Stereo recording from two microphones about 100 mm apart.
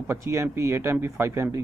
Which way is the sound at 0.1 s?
25° right (ahead or behind).